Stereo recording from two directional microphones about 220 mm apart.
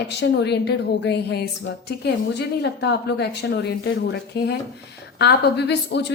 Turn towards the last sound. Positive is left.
turn(degrees=50)  # may be behind; listen again after turning